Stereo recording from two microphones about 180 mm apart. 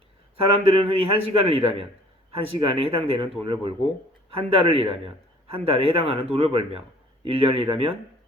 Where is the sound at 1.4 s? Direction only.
35° right (ahead or behind).